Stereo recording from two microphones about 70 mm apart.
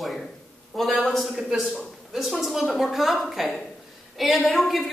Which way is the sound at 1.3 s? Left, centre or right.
Centre.